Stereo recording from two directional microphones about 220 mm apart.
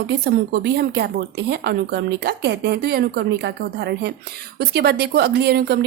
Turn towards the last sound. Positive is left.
turn(degrees=-45)  # may be behind; listen again after turning